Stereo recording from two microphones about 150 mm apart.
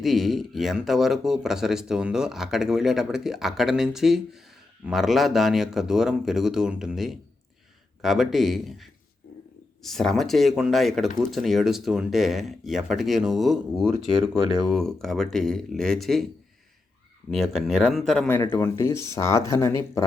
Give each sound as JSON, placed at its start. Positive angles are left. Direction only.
{"t": 0.0, "sound": "speech", "side_deg": 0}
{"t": 17.3, "sound": "speech", "side_deg": 0}
{"t": 18.3, "sound": "speech", "side_deg": 15}